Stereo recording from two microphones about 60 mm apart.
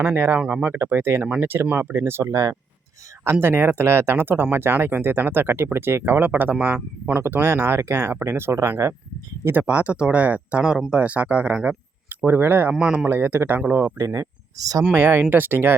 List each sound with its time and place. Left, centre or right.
0.0 s speech: right
0.3 s speech: right
0.7 s speech: right
2.3 s speech: right
3.4 s speech: right
9.6 s speech: right
12.0 s speech: right
12.8 s speech: centre
13.1 s speech: right
14.0 s speech: right
14.9 s speech: right